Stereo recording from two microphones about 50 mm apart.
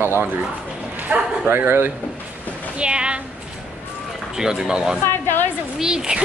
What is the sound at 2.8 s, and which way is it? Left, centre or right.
Speech, centre.